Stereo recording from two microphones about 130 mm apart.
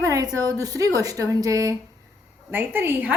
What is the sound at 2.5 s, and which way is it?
Speech, 15° right (ahead or behind).